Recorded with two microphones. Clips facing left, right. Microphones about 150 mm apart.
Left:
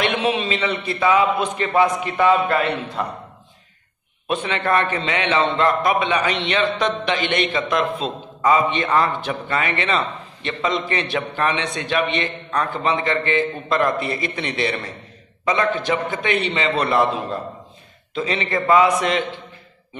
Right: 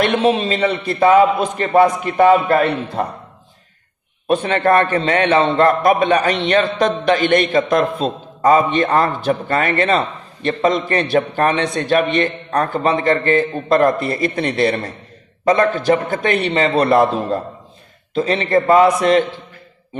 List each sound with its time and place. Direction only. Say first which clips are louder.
0.0 s a man's voice: right 5 dB; 40° right (ahead or behind)
4.3 s a man's voice: right 6 dB; 40° right (ahead or behind)